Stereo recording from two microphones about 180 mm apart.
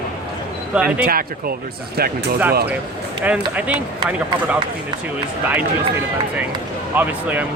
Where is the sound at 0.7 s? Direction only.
5° right (ahead or behind).